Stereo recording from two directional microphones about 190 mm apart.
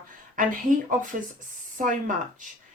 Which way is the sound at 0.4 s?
45° right (ahead or behind).